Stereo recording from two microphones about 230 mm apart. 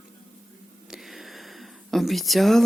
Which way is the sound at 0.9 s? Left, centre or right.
Centre.